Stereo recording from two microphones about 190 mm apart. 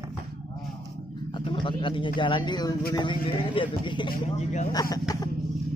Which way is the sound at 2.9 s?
25° left (ahead or behind).